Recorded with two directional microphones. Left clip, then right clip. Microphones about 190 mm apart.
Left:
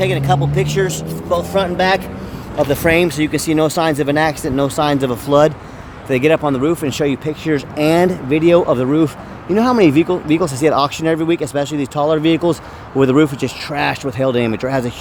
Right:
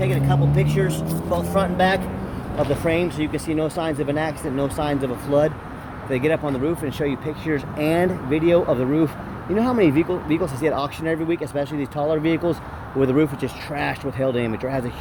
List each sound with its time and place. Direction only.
0.0 s speech: 40° left (ahead or behind)
1.3 s speech: 55° left (ahead or behind)